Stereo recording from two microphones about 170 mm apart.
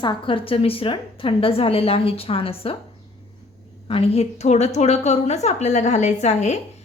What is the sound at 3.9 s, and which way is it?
A woman's voice, 35° left (ahead or behind).